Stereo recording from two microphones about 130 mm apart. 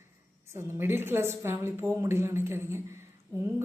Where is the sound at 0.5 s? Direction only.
20° right (ahead or behind).